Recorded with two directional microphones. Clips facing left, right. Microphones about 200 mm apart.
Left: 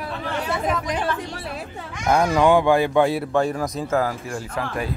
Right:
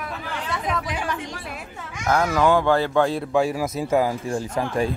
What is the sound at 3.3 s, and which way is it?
Speech, 5° right (ahead or behind).